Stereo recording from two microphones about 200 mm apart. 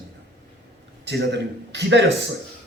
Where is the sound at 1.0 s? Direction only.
60° right (ahead or behind).